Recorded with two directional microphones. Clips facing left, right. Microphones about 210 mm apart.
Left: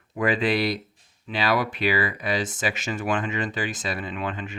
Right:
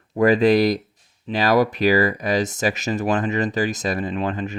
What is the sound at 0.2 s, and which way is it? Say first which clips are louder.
Speech: right 8 dB; 40° right (ahead or behind).